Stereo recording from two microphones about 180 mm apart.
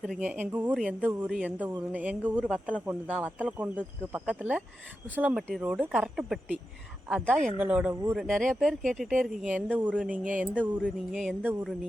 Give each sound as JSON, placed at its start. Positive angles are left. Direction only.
{"t": 0.2, "sound": "speech", "side_deg": -5}
{"t": 8.1, "sound": "speech", "side_deg": 5}